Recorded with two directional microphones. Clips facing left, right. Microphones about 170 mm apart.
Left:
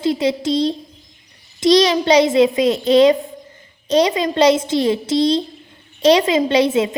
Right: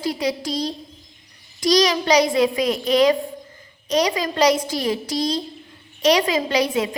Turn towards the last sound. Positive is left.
turn(degrees=25)  # may be behind; listen again after turning